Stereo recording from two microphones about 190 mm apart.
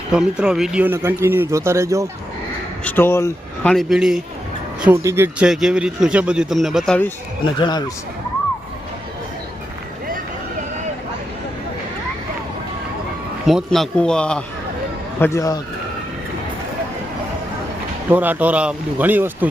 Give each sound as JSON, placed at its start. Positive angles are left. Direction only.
{"t": 0.1, "sound": "speech", "side_deg": -5}
{"t": 2.8, "sound": "speech", "side_deg": 10}
{"t": 7.4, "sound": "speech", "side_deg": 25}
{"t": 13.5, "sound": "speech", "side_deg": 0}
{"t": 15.2, "sound": "speech", "side_deg": 15}
{"t": 18.1, "sound": "speech", "side_deg": -10}